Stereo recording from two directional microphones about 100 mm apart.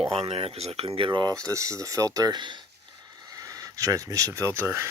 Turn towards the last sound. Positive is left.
turn(degrees=-25)  # may be behind; listen again after turning